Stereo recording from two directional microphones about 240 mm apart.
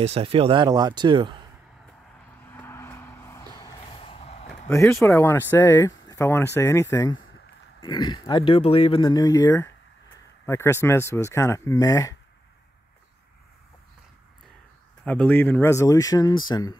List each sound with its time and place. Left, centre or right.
0.0 s speech: right
2.5 s vehicle: centre; by 4.5 s left
4.6 s speech: centre
15.0 s speech: centre